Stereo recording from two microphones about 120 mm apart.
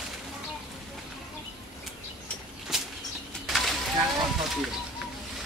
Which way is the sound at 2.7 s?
5° right (ahead or behind).